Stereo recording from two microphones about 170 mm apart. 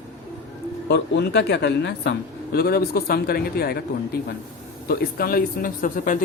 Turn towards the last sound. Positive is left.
turn(degrees=50)  # may be behind; listen again after turning